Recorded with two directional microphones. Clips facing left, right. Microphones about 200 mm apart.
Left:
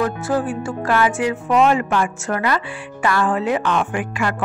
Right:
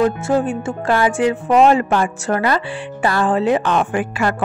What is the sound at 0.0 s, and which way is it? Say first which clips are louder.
Music: right 4 dB; 25° right (ahead or behind).